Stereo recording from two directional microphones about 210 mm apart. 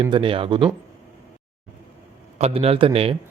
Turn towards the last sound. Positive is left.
turn(degrees=-25)  # may be behind; listen again after turning